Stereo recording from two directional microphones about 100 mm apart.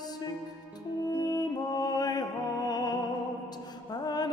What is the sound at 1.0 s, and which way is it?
Music, 40° left (ahead or behind).